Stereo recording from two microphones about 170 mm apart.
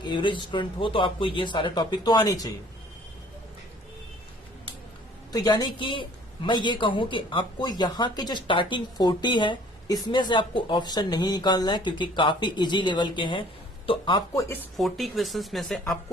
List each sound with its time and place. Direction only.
0.0 s a woman's voice: 30° left (ahead or behind)
5.3 s a woman's voice: 25° left (ahead or behind)
14.8 s speech: centre (ahead or behind)